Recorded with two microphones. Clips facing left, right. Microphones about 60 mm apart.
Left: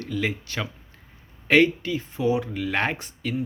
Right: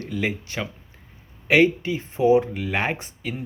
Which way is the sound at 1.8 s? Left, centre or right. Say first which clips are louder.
Right 4 dB; right.